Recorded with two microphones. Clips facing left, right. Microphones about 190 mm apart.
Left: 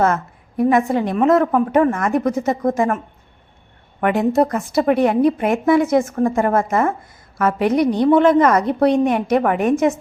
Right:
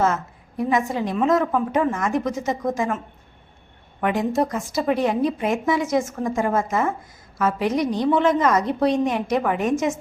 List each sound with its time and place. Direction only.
0.0 s a woman's voice: 60° left (ahead or behind)
4.0 s a woman's voice: 60° left (ahead or behind)